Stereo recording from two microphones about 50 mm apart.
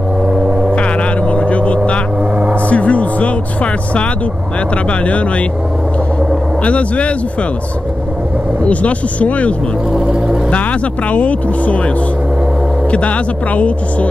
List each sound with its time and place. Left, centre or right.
0.2 s gong: centre
0.7 s vehicle: left
2.7 s music: left
4.8 s speech: left
6.6 s speech: left
8.6 s speech: left
10.0 s speech: right
10.5 s speech: left
12.9 s speech: left